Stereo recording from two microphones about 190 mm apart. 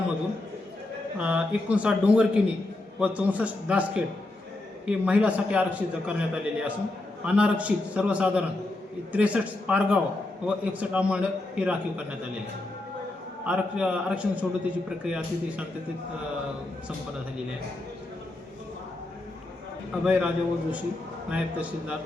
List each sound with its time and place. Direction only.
1.2 s a man's voice: 5° right (ahead or behind)
13.4 s a man's voice: 5° right (ahead or behind)
20.1 s a man's voice: 10° right (ahead or behind)